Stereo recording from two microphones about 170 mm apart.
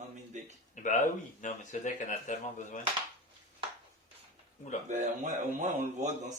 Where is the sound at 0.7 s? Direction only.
50° left (ahead or behind).